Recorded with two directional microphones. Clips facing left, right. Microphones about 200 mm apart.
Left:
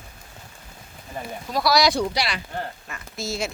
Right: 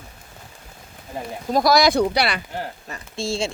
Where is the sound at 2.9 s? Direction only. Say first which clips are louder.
Right 4 dB; 30° right (ahead or behind).